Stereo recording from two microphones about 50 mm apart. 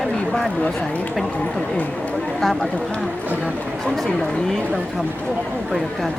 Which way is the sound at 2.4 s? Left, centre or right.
Centre.